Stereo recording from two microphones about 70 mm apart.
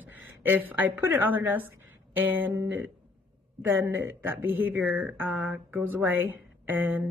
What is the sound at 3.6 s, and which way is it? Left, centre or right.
Speech, right.